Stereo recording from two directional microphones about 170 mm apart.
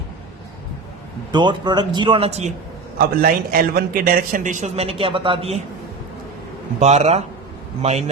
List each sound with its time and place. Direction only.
1.3 s speech: 25° right (ahead or behind)
3.0 s a man's voice: 60° right (ahead or behind); by 5.6 s 35° right (ahead or behind)
6.7 s a man's voice: 40° right (ahead or behind)